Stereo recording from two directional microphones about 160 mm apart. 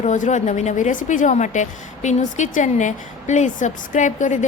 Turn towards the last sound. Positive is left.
turn(degrees=50)  # may be behind; listen again after turning